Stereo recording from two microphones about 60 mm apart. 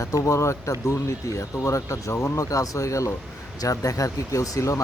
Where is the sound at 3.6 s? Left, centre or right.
Left.